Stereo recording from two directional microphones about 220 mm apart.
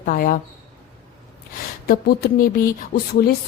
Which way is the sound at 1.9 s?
45° left (ahead or behind).